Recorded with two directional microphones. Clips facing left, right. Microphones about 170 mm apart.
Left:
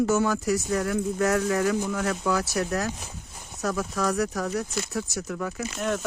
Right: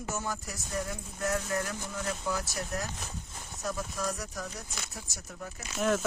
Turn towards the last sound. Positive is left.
turn(degrees=0)  # may be behind; listen again after turning